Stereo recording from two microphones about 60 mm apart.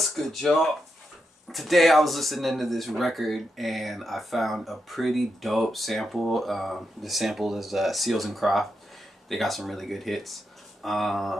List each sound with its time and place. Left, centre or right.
0.0 s speech: centre